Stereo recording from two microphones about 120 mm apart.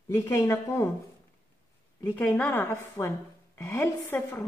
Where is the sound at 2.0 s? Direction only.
15° left (ahead or behind).